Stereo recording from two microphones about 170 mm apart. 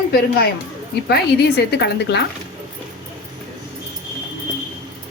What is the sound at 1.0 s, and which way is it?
Speech, 70° left (ahead or behind).